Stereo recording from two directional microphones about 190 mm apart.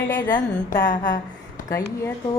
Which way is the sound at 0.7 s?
50° left (ahead or behind).